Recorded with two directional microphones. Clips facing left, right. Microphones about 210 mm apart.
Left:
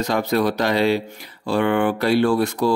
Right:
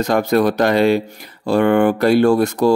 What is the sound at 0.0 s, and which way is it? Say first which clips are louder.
Speech: right 5 dB; 45° right (ahead or behind).